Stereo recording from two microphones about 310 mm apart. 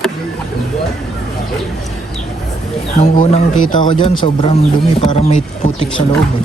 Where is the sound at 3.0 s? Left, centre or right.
Left.